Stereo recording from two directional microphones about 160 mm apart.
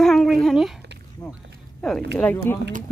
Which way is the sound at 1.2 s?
20° left (ahead or behind).